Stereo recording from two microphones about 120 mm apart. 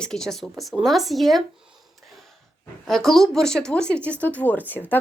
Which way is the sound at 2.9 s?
5° left (ahead or behind).